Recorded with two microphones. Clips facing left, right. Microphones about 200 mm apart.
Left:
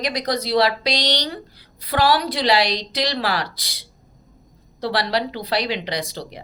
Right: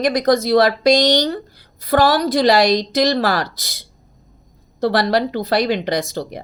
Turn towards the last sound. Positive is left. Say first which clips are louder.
# right 6 dB
turn(degrees=-45)  # may be behind; listen again after turning